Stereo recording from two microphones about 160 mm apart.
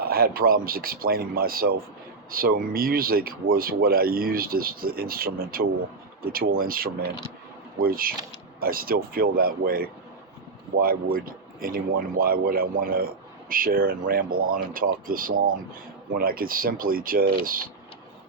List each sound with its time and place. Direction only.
0.1 s a man's voice: 70° right (ahead or behind)